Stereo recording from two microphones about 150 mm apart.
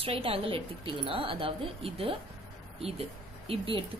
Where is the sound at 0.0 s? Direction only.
40° right (ahead or behind).